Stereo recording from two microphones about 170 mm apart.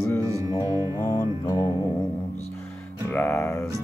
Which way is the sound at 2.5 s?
10° left (ahead or behind).